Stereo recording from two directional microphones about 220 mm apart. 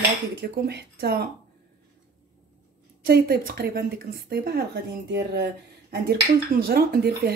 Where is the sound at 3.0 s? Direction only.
45° right (ahead or behind).